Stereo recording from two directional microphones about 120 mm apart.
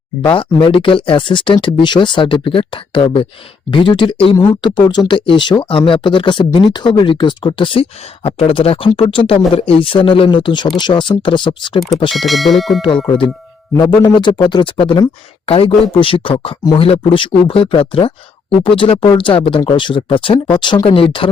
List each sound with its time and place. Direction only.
0.2 s speech: 45° left (ahead or behind)
12.1 s speech: centre (ahead or behind)
14.0 s speech: 40° left (ahead or behind)